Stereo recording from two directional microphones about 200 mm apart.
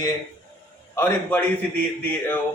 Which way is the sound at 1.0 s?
10° left (ahead or behind).